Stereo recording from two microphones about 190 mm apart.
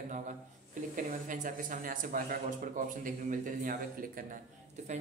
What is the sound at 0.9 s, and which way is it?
Speech, 45° right (ahead or behind).